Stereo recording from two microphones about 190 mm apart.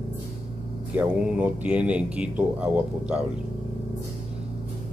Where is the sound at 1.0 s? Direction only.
10° right (ahead or behind).